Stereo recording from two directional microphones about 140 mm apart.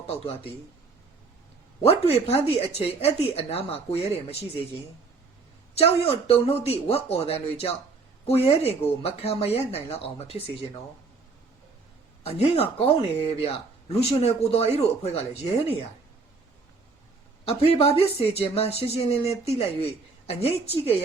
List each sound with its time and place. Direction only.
1.8 s speech: 45° left (ahead or behind)
5.7 s speech: 45° left (ahead or behind)
12.2 s speech: 45° left (ahead or behind)
17.4 s speech: 45° left (ahead or behind)